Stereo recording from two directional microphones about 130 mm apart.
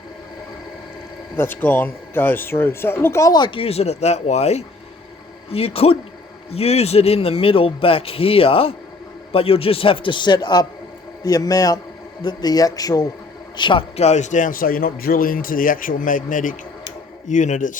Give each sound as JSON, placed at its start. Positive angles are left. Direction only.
{"t": 1.4, "sound": "a man's voice", "side_deg": 15}
{"t": 13.9, "sound": "a man's voice", "side_deg": 60}
{"t": 17.2, "sound": "speech", "side_deg": 70}